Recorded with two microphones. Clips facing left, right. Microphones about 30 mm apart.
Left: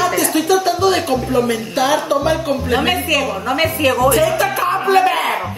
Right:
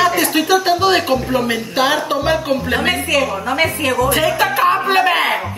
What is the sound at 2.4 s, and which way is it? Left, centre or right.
Speech, centre.